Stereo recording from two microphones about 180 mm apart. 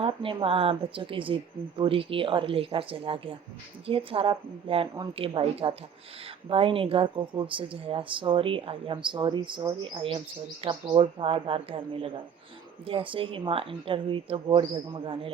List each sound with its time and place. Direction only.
0.0 s a woman's voice: 30° right (ahead or behind)